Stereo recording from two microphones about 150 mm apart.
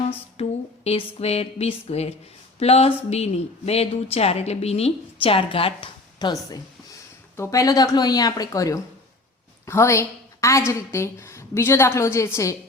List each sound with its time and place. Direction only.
0.4 s a woman's voice: 40° left (ahead or behind)
7.3 s a woman's voice: 20° left (ahead or behind)